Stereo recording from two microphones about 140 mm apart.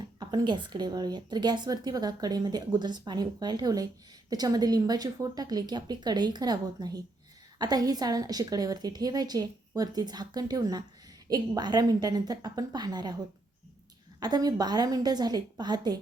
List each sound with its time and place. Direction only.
0.0 s a woman's voice: 35° right (ahead or behind)
14.2 s a woman's voice: 30° right (ahead or behind)